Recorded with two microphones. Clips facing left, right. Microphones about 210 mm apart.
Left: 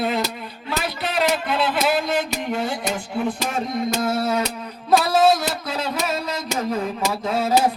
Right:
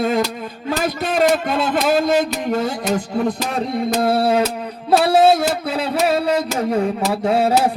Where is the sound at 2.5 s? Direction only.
40° right (ahead or behind).